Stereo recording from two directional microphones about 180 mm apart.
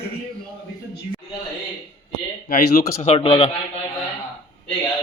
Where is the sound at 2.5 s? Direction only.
50° left (ahead or behind).